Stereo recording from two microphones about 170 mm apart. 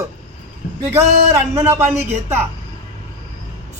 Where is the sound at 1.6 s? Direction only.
15° right (ahead or behind).